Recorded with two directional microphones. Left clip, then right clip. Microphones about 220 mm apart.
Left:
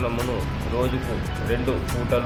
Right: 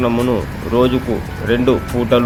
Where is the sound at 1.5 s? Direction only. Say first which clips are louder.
Right 11 dB; 40° right (ahead or behind).